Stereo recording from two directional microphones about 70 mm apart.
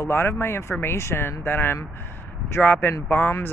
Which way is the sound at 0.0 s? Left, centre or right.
Left.